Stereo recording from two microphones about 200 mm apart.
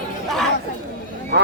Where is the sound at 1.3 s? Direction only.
60° right (ahead or behind).